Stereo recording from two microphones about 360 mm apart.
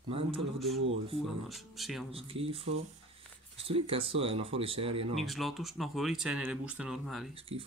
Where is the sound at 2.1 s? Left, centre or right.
Centre.